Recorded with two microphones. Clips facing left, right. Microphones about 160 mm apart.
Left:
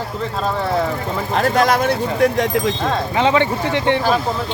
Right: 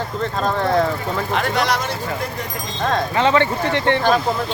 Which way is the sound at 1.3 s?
40° left (ahead or behind).